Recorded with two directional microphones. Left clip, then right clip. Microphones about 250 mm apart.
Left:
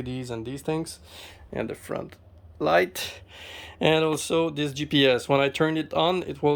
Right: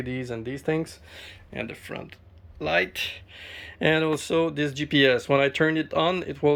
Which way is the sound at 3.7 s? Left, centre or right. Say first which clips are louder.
Left 1 dB; centre.